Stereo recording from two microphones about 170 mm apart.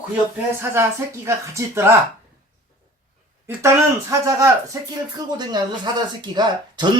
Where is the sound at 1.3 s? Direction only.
15° right (ahead or behind).